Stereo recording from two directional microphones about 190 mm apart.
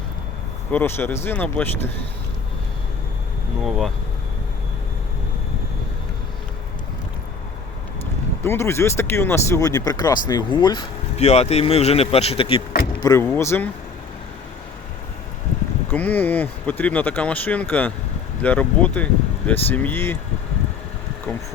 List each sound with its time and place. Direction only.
0.7 s speech: 10° left (ahead or behind)
3.6 s speech: centre (ahead or behind)
8.4 s speech: 15° left (ahead or behind)
11.2 s speech: 35° left (ahead or behind); by 13.7 s 10° left (ahead or behind)
15.9 s speech: 10° left (ahead or behind)